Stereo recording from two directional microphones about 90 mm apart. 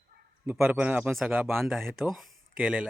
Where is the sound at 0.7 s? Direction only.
15° right (ahead or behind).